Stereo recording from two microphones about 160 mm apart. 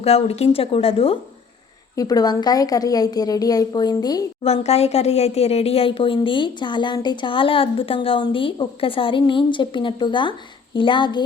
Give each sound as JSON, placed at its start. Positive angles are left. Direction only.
{"t": 0.0, "sound": "speech", "side_deg": 40}
{"t": 2.0, "sound": "a woman's voice", "side_deg": 25}
{"t": 4.4, "sound": "speech", "side_deg": 40}